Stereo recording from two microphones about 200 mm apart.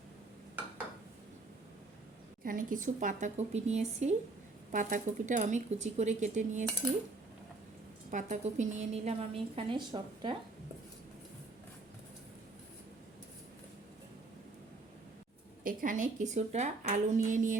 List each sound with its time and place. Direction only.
2.4 s a woman's voice: 45° right (ahead or behind)
8.1 s a woman's voice: 35° right (ahead or behind)
15.6 s a woman's voice: 45° right (ahead or behind)